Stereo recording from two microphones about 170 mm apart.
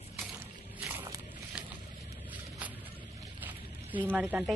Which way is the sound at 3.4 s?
10° right (ahead or behind).